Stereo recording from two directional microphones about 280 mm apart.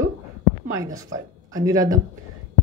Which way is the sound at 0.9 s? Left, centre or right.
Centre.